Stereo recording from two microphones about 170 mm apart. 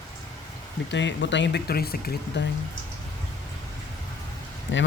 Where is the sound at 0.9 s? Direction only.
90° left; by 2.5 s 65° left (ahead or behind).